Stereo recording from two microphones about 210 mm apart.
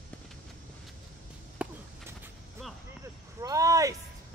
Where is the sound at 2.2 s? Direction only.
Centre (ahead or behind).